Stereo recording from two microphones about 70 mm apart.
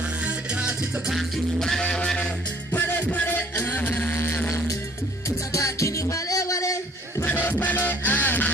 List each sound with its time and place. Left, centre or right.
0.2 s music: centre
1.1 s music: centre
2.7 s music: left
4.1 s music: left
5.5 s music: left
7.2 s music: left